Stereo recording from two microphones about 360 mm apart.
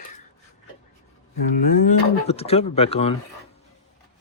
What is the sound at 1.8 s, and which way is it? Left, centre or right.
Speech, centre.